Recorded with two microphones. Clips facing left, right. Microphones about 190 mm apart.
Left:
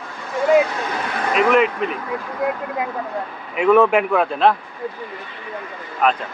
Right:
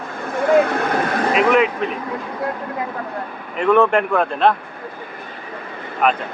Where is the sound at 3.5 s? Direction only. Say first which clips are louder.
Left 1 dB; 5° left (ahead or behind).